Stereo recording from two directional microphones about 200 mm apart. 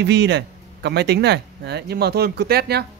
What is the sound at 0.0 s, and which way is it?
Speech, 60° right (ahead or behind).